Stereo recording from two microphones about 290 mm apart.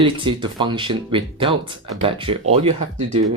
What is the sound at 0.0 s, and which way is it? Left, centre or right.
Speech, centre.